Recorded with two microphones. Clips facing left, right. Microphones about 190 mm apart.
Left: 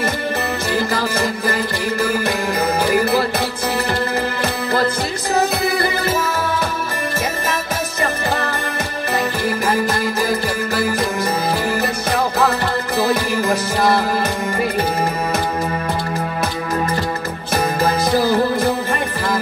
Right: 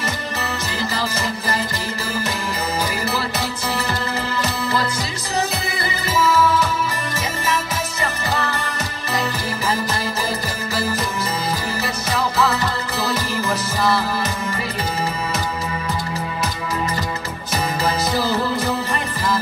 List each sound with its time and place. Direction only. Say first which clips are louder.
0.7 s music: left 5 dB; 55° left (ahead or behind)
2.8 s music: left 9 dB; 55° left (ahead or behind)
5.3 s music: left 6 dB; 55° left (ahead or behind)
11.8 s music: left 4 dB; 55° left (ahead or behind)
17.8 s music: left 5 dB; 55° left (ahead or behind)